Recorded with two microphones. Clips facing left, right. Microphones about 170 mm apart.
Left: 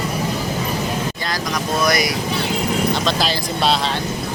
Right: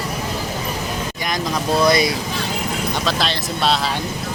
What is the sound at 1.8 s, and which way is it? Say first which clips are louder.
Speech: right 3 dB; 25° right (ahead or behind).